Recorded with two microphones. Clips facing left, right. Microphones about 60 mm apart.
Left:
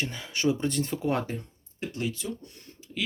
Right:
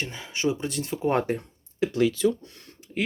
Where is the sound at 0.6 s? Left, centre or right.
Centre.